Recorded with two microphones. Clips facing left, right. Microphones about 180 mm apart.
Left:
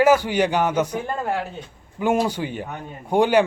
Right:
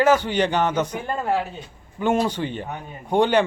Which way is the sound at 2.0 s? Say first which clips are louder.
Even; 10° left (ahead or behind).